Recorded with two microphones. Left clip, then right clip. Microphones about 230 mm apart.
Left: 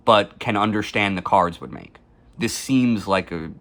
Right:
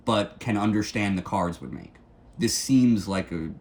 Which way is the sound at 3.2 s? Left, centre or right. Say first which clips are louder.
Left 3 dB; centre.